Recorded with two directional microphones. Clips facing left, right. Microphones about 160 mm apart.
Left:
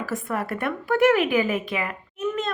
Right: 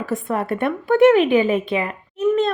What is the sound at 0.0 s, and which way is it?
A woman's voice, 25° right (ahead or behind).